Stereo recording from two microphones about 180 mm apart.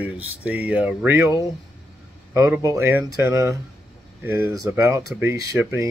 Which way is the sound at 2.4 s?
15° right (ahead or behind).